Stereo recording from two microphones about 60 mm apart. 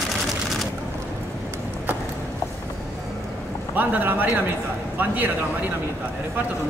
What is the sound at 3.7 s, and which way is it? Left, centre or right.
A man's voice, right.